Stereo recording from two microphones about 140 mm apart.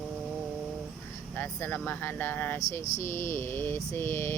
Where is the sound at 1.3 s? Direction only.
15° left (ahead or behind).